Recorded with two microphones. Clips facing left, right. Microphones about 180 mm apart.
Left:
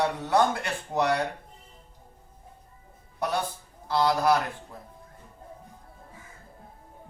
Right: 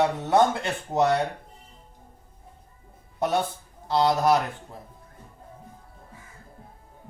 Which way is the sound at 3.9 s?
20° right (ahead or behind).